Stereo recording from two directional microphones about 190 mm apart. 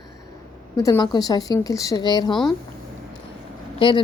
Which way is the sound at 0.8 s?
20° left (ahead or behind).